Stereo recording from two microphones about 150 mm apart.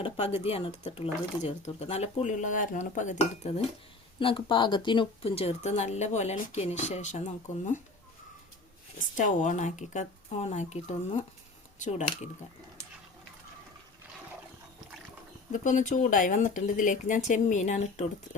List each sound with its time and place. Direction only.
0.0 s speech: 45° left (ahead or behind)
4.2 s speech: 35° left (ahead or behind); by 7.8 s 55° left (ahead or behind)
9.0 s speech: 60° left (ahead or behind)
15.5 s speech: 55° left (ahead or behind)